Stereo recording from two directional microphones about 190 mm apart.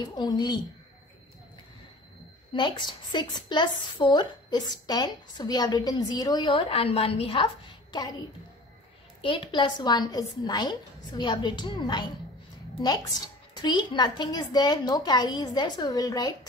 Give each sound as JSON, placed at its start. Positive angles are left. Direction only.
{"t": 0.0, "sound": "a woman's voice", "side_deg": 20}
{"t": 2.5, "sound": "a woman's voice", "side_deg": 25}
{"t": 9.2, "sound": "a woman's voice", "side_deg": 25}